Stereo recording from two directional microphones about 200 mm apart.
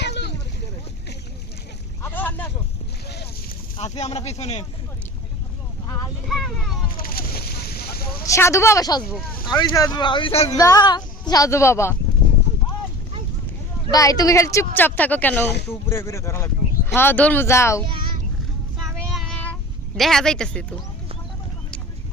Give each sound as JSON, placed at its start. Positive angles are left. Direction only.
{"t": 0.0, "sound": "boat", "side_deg": 60}
{"t": 2.0, "sound": "boat", "side_deg": 10}
{"t": 3.8, "sound": "speech", "side_deg": 35}
{"t": 6.2, "sound": "speech", "side_deg": 0}
{"t": 7.0, "sound": "a sound", "side_deg": 50}
{"t": 8.3, "sound": "speech", "side_deg": 15}
{"t": 10.6, "sound": "speech", "side_deg": 20}
{"t": 13.9, "sound": "speech", "side_deg": 20}
{"t": 19.1, "sound": "child singing", "side_deg": 0}
{"t": 20.0, "sound": "speech", "side_deg": 0}